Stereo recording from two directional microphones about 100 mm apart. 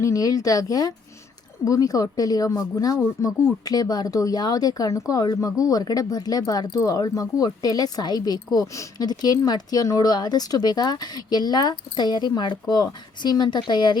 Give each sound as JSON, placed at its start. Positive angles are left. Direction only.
{"t": 0.0, "sound": "speech", "side_deg": 35}